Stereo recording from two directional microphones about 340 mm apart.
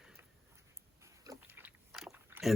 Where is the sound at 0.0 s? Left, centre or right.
Centre.